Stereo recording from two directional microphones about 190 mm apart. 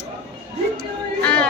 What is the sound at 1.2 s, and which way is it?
Crowd, 5° left (ahead or behind).